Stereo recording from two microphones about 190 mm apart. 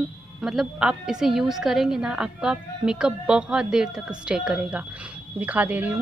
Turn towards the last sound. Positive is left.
turn(degrees=-10)  # may be behind; listen again after turning